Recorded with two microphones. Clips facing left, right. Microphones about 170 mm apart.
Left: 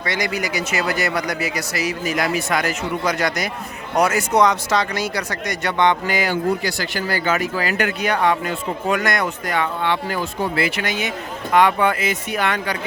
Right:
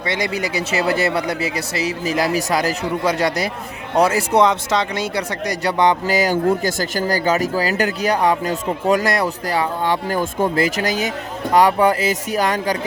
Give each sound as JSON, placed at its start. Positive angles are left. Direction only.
{"t": 0.0, "sound": "speech", "side_deg": -30}